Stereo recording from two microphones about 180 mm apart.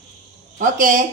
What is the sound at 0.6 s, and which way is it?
Speech, 50° right (ahead or behind).